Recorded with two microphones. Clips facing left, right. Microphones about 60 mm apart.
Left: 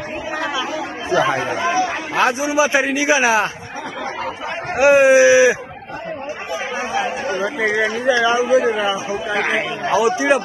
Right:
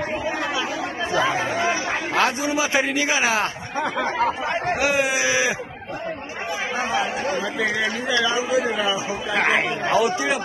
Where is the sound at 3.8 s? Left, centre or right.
Right.